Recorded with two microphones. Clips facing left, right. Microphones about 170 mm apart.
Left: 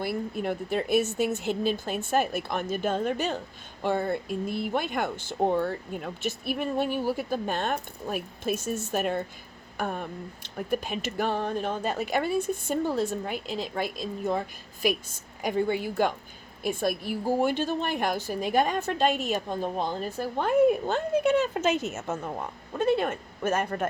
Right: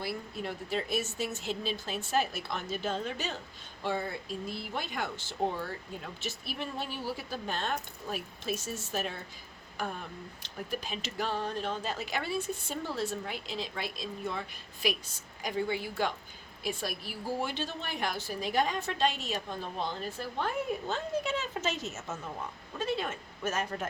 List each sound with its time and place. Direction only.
0.0 s a woman's voice: 55° left (ahead or behind)
15.4 s a woman's voice: 55° left (ahead or behind)